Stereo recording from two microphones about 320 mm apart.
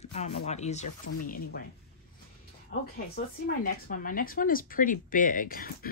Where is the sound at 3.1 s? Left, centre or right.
Left.